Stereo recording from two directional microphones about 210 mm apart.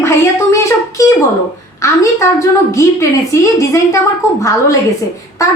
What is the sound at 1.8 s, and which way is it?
A woman's voice, 15° left (ahead or behind).